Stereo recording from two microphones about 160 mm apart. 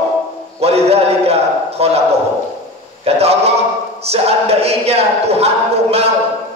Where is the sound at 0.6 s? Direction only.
40° right (ahead or behind).